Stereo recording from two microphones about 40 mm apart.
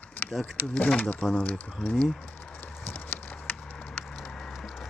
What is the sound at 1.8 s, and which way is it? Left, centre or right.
Speech, left.